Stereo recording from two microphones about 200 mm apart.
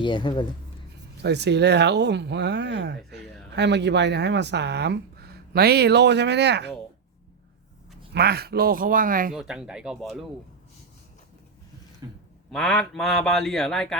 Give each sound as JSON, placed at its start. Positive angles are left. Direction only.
{"t": 0.0, "sound": "speech", "side_deg": 25}
{"t": 1.2, "sound": "speech", "side_deg": -55}
{"t": 8.1, "sound": "speech", "side_deg": -55}
{"t": 9.3, "sound": "a man's voice", "side_deg": -5}
{"t": 12.5, "sound": "a man's voice", "side_deg": 0}